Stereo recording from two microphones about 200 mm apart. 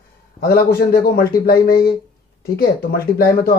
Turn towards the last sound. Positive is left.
turn(degrees=50)  # may be behind; listen again after turning